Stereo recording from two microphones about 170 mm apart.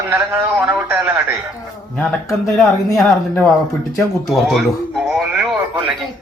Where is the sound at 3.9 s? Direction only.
Centre (ahead or behind).